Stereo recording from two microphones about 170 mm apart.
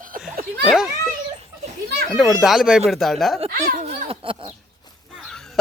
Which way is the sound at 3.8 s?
35° right (ahead or behind).